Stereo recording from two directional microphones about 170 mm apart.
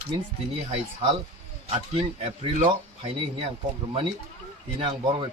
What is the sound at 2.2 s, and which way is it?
Speech, 35° right (ahead or behind).